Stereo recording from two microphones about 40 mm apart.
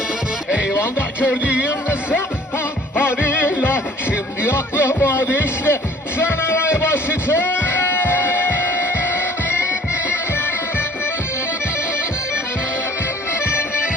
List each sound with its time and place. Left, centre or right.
0.7 s music: left
1.3 s music: right
3.2 s music: left
4.9 s a sound: left